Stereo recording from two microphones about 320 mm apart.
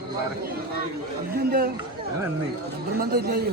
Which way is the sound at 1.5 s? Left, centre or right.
Right.